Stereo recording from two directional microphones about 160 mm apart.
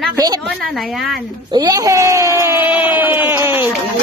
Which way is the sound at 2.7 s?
10° right (ahead or behind).